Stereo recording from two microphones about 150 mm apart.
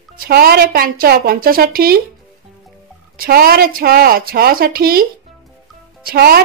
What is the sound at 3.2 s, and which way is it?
A woman's voice, 85° right.